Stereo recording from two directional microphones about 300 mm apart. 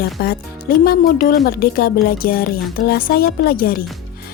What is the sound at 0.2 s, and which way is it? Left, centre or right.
Speech, left.